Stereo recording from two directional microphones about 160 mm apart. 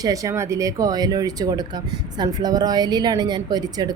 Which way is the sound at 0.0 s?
20° right (ahead or behind).